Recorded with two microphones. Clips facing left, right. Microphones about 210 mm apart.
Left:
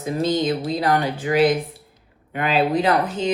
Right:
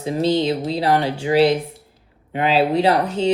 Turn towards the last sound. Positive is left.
turn(degrees=-30)  # may be behind; listen again after turning